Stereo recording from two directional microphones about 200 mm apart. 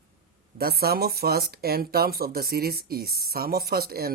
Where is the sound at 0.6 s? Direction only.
50° right (ahead or behind).